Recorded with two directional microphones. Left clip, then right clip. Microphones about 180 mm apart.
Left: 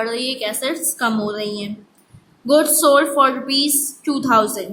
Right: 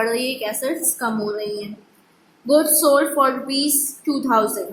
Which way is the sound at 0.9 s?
15° left (ahead or behind).